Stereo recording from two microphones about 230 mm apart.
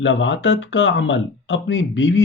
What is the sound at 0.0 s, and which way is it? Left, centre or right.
Speech, left.